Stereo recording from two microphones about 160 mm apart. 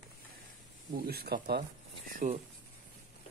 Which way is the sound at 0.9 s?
70° right (ahead or behind).